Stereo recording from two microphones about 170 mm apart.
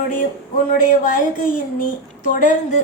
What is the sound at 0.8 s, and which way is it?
Speech, 50° left (ahead or behind).